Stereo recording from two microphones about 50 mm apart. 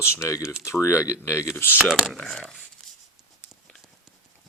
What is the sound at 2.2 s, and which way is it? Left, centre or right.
Speech, centre.